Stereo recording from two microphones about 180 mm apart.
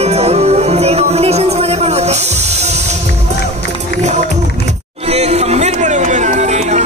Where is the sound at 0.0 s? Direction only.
35° right (ahead or behind).